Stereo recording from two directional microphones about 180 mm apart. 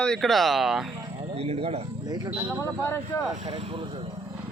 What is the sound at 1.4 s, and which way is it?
Speech, 35° right (ahead or behind).